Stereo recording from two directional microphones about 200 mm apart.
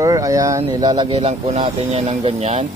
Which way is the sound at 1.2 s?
30° right (ahead or behind).